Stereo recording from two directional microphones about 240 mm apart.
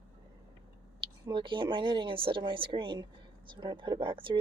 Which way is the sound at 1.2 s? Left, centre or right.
Right.